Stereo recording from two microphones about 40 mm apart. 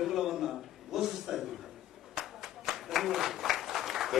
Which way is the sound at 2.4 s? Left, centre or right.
Centre.